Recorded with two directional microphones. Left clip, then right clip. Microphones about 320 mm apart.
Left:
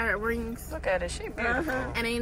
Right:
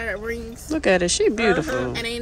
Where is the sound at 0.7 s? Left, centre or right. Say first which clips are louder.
Right 10 dB; right.